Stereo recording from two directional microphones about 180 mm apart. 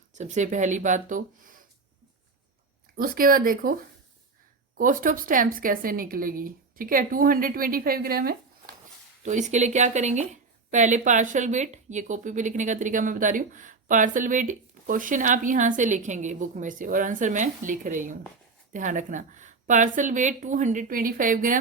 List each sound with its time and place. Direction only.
0.1 s speech: 40° right (ahead or behind)
2.9 s speech: 55° right (ahead or behind)
4.8 s speech: 50° right (ahead or behind)
9.2 s speech: 40° right (ahead or behind)